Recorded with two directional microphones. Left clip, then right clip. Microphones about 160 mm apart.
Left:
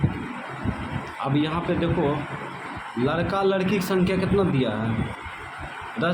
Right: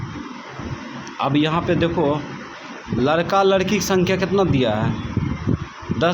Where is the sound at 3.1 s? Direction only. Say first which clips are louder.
Right 7 dB; 35° right (ahead or behind).